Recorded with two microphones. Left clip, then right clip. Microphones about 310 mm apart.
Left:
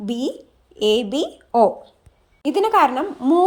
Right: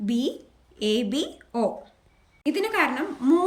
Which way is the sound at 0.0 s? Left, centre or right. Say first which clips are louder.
Left 2 dB; centre.